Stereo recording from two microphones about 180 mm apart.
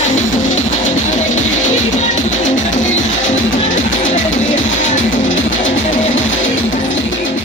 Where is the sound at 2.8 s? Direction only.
90° left.